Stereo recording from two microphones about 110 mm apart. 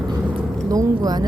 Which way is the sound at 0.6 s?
30° right (ahead or behind).